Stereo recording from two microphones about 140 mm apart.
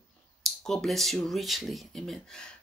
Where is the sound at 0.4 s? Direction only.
Centre (ahead or behind).